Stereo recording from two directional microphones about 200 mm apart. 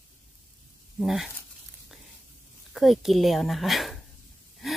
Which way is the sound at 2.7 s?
Centre (ahead or behind).